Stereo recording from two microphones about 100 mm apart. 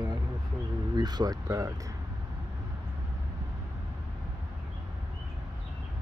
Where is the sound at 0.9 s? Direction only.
45° right (ahead or behind).